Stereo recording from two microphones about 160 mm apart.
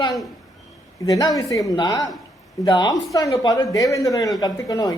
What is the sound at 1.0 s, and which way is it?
Speech, 20° left (ahead or behind).